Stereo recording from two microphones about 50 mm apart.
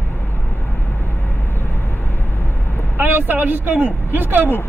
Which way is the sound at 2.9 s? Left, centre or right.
Right.